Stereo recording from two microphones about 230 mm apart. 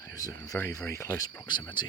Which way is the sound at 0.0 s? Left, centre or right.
Centre.